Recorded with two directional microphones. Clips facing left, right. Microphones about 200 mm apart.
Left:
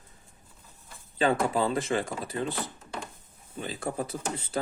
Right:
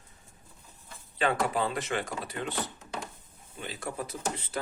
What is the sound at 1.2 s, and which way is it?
Speech, 30° left (ahead or behind).